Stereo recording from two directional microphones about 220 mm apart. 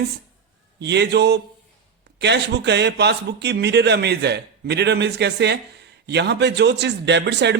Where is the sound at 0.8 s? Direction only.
50° right (ahead or behind).